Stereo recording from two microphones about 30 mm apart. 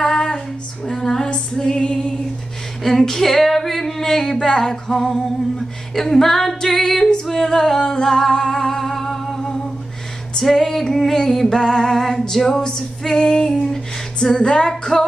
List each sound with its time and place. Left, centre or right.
0.0 s female singing: centre
1.2 s female singing: left
2.8 s singing: centre
4.9 s female singing: centre
7.4 s singing: centre
7.9 s humming: left
10.3 s music: centre
12.5 s singing: left
13.1 s female singing: left
14.2 s a sound: left
14.9 s music: centre